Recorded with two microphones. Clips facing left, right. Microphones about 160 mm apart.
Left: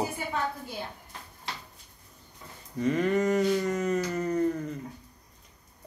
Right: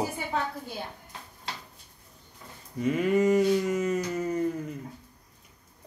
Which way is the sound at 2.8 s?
5° right (ahead or behind).